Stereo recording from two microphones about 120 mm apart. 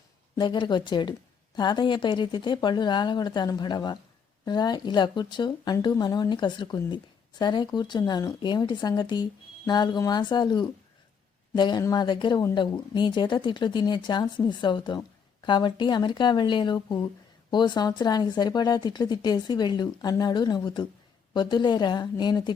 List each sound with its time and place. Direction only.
0.3 s speech: 40° left (ahead or behind)